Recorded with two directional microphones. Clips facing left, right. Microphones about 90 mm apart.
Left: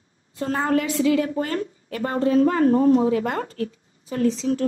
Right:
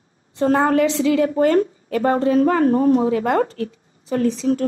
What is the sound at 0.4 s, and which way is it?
Speech, 45° right (ahead or behind).